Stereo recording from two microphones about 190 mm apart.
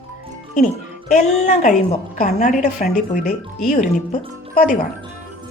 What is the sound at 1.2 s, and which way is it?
A woman's voice, 40° left (ahead or behind).